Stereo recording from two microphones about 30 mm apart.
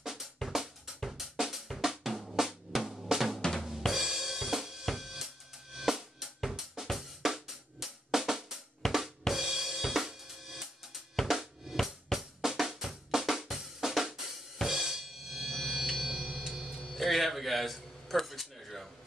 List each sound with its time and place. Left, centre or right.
0.0 s drum: centre
0.5 s drum kit: centre
1.8 s drum: centre
3.6 s drum kit: centre
7.2 s drum: centre
8.8 s drum kit: centre
9.3 s drum kit: centre
11.8 s drum: centre; by 16.8 s right
16.9 s a sound: centre